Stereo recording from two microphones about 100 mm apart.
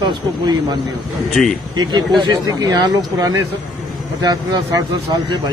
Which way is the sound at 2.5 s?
45° right (ahead or behind).